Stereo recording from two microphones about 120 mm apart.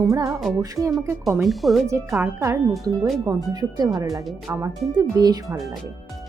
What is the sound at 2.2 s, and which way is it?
Speech, 20° right (ahead or behind).